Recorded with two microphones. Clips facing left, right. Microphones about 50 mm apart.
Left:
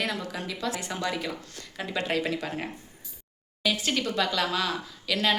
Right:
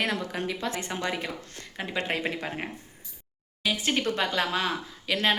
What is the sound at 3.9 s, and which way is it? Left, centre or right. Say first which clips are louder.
Speech: even; right.